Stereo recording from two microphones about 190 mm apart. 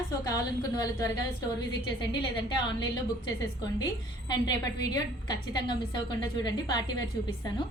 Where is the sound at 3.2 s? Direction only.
25° left (ahead or behind).